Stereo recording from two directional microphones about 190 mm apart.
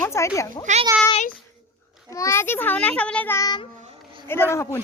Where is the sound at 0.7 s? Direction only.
40° right (ahead or behind).